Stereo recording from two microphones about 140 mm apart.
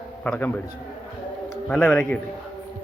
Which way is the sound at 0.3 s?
10° left (ahead or behind).